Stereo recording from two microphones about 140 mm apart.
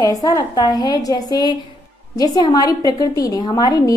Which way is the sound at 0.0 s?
25° left (ahead or behind).